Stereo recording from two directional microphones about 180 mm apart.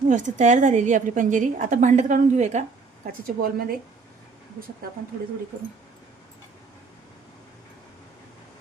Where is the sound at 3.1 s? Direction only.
50° right (ahead or behind).